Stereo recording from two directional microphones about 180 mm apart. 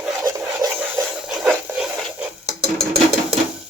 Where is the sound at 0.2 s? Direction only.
20° right (ahead or behind).